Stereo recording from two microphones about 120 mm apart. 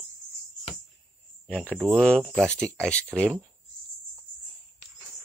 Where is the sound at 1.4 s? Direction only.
10° left (ahead or behind).